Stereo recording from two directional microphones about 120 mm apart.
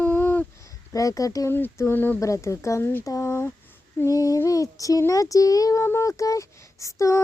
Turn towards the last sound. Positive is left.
turn(degrees=25)  # may be behind; listen again after turning